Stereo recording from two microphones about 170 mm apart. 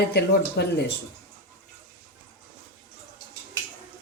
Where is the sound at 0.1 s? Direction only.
75° left (ahead or behind).